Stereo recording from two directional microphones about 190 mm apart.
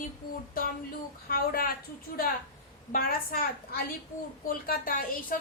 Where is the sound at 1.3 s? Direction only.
50° left (ahead or behind).